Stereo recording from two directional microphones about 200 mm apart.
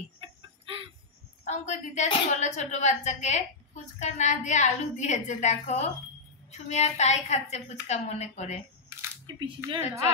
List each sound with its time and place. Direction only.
0.2 s a sound: 25° right (ahead or behind)
1.4 s a woman's voice: 35° left (ahead or behind)
9.1 s speech: 20° right (ahead or behind)